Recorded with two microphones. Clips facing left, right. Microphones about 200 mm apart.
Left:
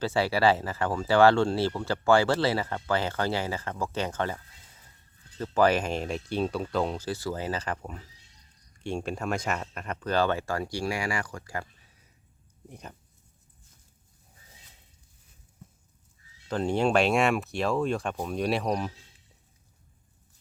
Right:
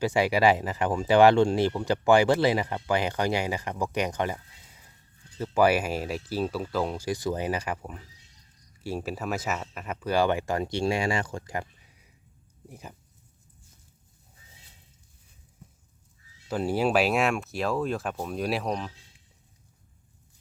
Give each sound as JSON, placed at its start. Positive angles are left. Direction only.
{"t": 0.0, "sound": "speech", "side_deg": -15}
{"t": 5.4, "sound": "speech", "side_deg": -10}
{"t": 12.6, "sound": "speech", "side_deg": -5}
{"t": 16.5, "sound": "speech", "side_deg": -5}